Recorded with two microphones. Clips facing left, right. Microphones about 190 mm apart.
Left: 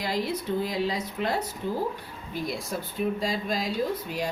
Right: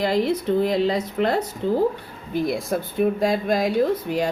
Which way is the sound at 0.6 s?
60° right (ahead or behind).